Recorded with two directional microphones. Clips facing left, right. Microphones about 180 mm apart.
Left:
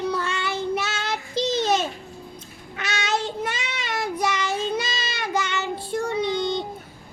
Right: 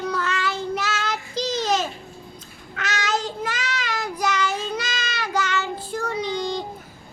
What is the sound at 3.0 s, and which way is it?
Child singing, 25° left (ahead or behind).